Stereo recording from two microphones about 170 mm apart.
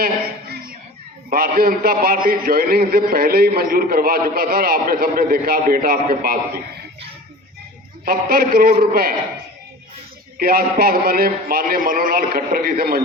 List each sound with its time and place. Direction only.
0.0 s a sound: 60° right (ahead or behind)
1.3 s a man's voice: 60° right (ahead or behind)
8.0 s a man's voice: 60° right (ahead or behind)
10.3 s a man's voice: 60° right (ahead or behind)